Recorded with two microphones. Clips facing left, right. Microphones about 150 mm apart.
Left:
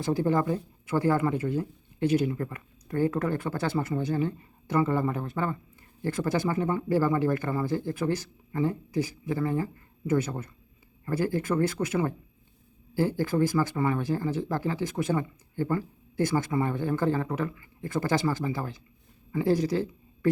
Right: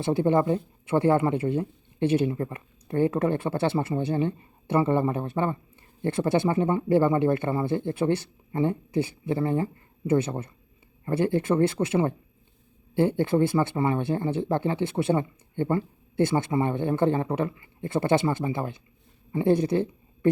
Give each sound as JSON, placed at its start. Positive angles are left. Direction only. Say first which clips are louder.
{"t": 0.0, "sound": "speech", "louder": "right 3 dB", "side_deg": -25}